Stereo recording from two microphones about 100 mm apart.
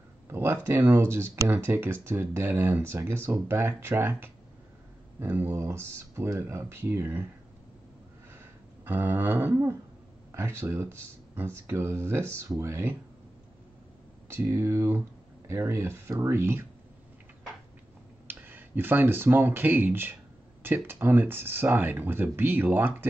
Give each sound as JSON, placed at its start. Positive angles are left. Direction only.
{"t": 0.3, "sound": "speech", "side_deg": -25}
{"t": 8.8, "sound": "speech", "side_deg": -20}
{"t": 14.3, "sound": "speech", "side_deg": -25}
{"t": 18.2, "sound": "speech", "side_deg": -20}